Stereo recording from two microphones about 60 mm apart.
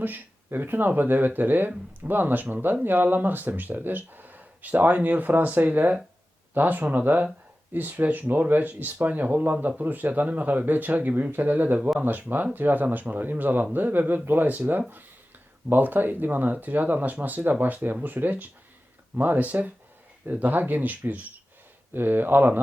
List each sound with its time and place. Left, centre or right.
0.0 s speech: right